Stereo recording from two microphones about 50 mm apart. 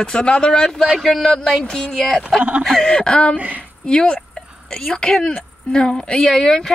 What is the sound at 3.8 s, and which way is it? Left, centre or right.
Speech, centre.